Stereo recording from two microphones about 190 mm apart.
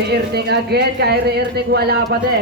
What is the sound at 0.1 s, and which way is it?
Speech, 60° right (ahead or behind).